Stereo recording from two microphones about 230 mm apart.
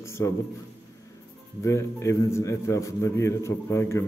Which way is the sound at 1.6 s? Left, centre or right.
Centre.